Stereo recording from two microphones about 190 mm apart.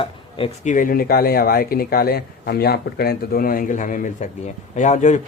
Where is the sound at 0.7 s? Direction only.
45° left (ahead or behind).